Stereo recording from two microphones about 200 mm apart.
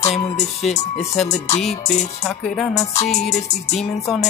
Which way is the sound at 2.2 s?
5° left (ahead or behind).